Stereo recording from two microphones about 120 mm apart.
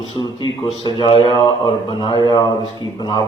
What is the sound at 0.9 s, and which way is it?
Speech, 45° left (ahead or behind).